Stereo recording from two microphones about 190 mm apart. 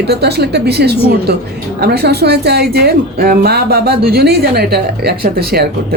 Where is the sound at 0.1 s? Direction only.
60° right (ahead or behind).